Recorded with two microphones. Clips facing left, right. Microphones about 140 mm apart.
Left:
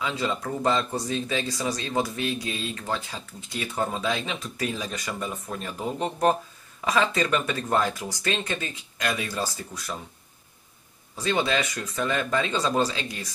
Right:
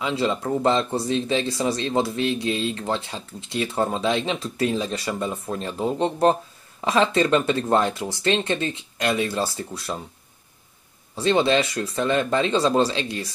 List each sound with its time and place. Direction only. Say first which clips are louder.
0.0 s speech: right 4 dB; 30° right (ahead or behind)
11.1 s speech: right 6 dB; 30° right (ahead or behind)